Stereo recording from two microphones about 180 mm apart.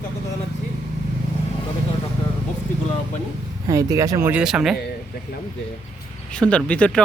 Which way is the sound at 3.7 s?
20° right (ahead or behind).